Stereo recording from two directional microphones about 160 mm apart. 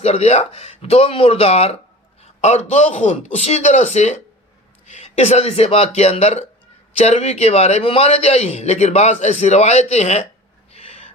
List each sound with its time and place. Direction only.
0.0 s a man's voice: 40° left (ahead or behind)
10.7 s owl: 40° left (ahead or behind)